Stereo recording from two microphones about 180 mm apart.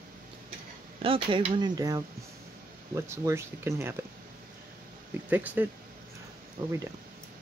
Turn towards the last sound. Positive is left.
turn(degrees=-20)  # may be behind; listen again after turning